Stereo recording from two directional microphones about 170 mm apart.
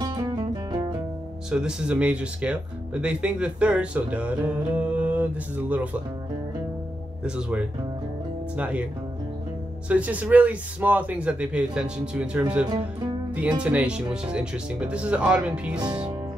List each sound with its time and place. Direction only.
0.7 s music: 25° right (ahead or behind)
1.5 s speech: 5° right (ahead or behind)
7.2 s speech: 5° right (ahead or behind)
9.8 s speech: 10° right (ahead or behind)
15.8 s speech: 25° right (ahead or behind)